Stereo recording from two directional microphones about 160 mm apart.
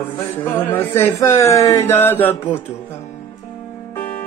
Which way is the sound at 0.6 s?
10° left (ahead or behind).